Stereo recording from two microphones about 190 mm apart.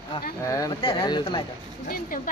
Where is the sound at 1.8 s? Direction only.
50° left (ahead or behind).